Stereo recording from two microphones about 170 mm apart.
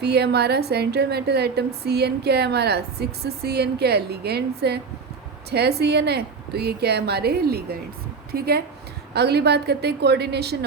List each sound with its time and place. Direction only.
0.0 s a woman's voice: 75° right (ahead or behind)